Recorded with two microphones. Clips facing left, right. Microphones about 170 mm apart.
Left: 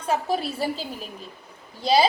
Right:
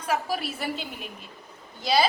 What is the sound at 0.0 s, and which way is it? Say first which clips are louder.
A woman's voice: left 3 dB; 30° left (ahead or behind).